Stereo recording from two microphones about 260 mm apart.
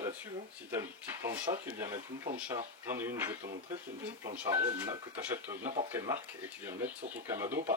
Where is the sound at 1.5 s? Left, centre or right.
Right.